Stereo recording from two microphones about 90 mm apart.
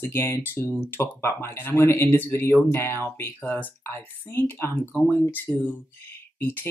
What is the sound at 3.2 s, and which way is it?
Speech, 20° left (ahead or behind).